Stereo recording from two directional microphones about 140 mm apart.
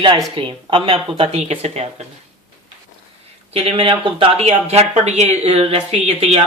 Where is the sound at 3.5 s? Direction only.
40° right (ahead or behind).